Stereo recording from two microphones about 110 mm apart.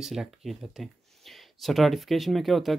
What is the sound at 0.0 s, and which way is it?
Speech, 5° right (ahead or behind).